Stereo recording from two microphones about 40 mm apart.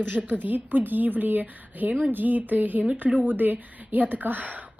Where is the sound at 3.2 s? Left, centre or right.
Right.